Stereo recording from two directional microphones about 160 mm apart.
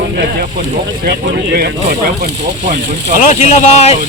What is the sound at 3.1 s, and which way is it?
Speech, 50° left (ahead or behind).